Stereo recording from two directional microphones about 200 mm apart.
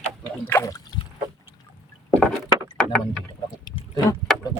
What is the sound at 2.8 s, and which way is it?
Rowboat, 5° left (ahead or behind).